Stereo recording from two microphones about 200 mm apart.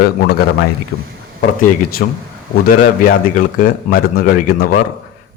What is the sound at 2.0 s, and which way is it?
Speech, 55° left (ahead or behind).